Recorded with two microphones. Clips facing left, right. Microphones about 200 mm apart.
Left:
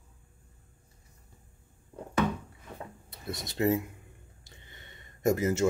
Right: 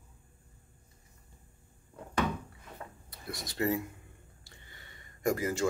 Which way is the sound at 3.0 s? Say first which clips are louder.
Left 4 dB; 25° left (ahead or behind).